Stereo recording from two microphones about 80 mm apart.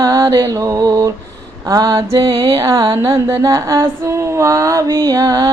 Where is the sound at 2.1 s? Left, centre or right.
Right.